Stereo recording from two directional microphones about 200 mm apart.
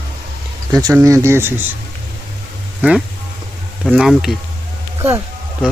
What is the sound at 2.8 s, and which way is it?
Speech, 5° right (ahead or behind).